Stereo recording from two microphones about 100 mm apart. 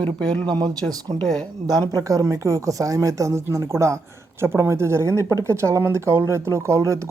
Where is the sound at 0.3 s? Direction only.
45° right (ahead or behind).